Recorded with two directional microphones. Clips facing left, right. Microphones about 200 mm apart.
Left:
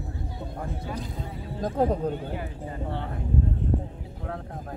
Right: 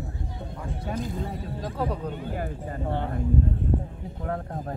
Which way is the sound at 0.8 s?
50° right (ahead or behind).